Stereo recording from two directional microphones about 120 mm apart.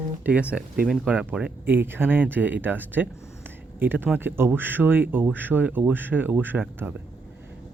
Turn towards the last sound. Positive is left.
turn(degrees=-15)  # may be behind; listen again after turning